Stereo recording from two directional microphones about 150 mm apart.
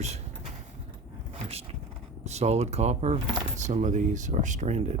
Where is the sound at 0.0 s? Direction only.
45° right (ahead or behind).